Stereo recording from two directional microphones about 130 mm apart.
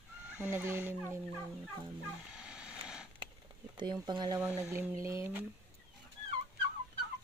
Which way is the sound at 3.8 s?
35° right (ahead or behind).